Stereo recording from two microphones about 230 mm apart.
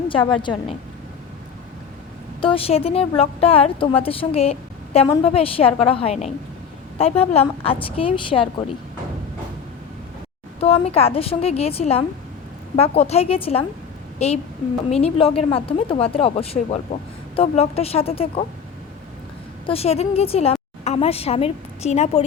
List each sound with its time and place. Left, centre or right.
0.1 s a woman's voice: left
2.4 s a woman's voice: left
10.6 s a woman's voice: left
19.6 s a woman's voice: left